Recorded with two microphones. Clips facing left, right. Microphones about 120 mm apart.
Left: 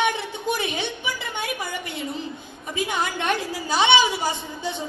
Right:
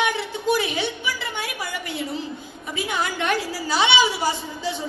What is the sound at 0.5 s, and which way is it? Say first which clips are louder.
A woman's voice: right 3 dB; 20° left (ahead or behind).